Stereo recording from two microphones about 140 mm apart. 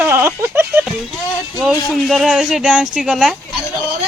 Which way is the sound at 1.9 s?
Centre (ahead or behind).